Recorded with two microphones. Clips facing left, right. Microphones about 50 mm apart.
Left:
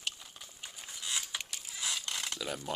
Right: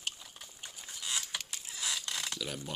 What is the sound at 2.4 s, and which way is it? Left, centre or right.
Speech, left.